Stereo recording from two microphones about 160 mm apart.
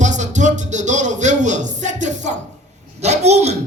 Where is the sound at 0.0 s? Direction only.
50° right (ahead or behind).